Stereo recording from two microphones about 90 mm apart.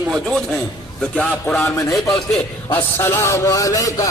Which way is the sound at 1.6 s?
30° left (ahead or behind).